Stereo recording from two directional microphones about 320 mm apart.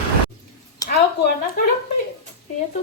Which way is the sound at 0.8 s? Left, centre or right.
Centre.